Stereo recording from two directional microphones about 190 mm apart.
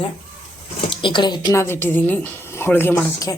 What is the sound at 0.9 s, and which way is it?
A woman's voice, 25° left (ahead or behind).